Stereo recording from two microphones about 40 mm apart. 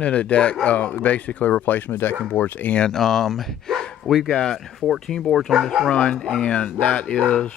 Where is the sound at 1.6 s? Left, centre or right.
Left.